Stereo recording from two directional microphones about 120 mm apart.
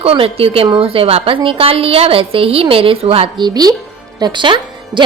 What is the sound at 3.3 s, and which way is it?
Speech, 35° right (ahead or behind).